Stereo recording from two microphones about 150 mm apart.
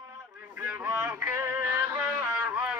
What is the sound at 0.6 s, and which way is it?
Music, 15° right (ahead or behind).